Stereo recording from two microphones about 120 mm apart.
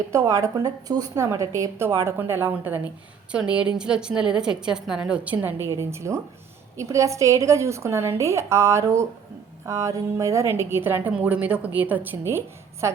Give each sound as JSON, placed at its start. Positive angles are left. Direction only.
{"t": 0.1, "sound": "a woman's voice", "side_deg": -25}